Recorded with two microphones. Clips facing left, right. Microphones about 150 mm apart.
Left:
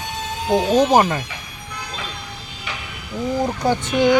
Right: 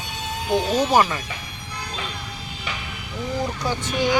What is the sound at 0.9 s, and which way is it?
Speech, 45° left (ahead or behind).